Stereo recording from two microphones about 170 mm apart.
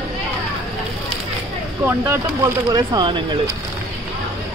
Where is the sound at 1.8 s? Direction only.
10° right (ahead or behind).